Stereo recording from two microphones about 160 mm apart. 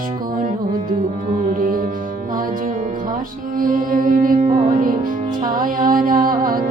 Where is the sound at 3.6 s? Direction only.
60° right (ahead or behind).